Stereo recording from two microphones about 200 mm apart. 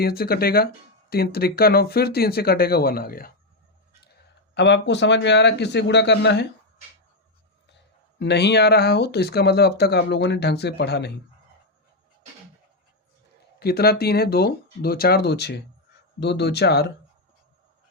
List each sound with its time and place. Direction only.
0.0 s speech: 50° left (ahead or behind)
4.5 s speech: 60° left (ahead or behind)
8.2 s speech: 60° left (ahead or behind)
13.6 s speech: 50° left (ahead or behind)